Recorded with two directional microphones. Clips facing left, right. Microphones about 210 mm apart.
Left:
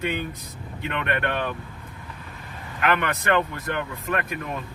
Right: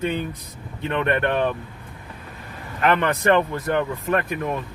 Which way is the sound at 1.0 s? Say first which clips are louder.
Right 6 dB; 30° right (ahead or behind).